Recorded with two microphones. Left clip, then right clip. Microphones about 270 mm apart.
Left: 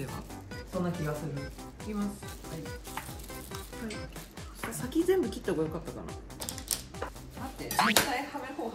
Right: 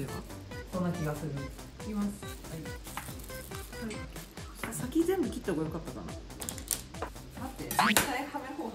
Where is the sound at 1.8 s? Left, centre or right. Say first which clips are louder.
Even; centre.